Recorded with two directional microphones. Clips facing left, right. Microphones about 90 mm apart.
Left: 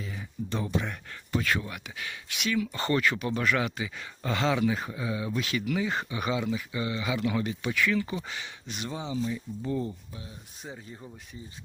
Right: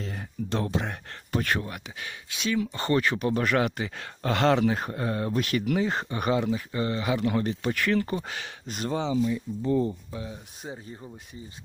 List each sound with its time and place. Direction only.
0.0 s a sound: 65° right (ahead or behind)
0.8 s speech: 45° right (ahead or behind)
1.5 s speech: 30° right (ahead or behind)
10.6 s speech: 5° right (ahead or behind)